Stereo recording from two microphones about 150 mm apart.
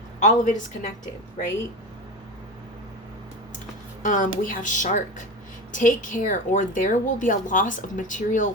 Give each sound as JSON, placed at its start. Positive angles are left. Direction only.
{"t": 0.2, "sound": "a woman's voice", "side_deg": 55}
{"t": 4.0, "sound": "a woman's voice", "side_deg": 60}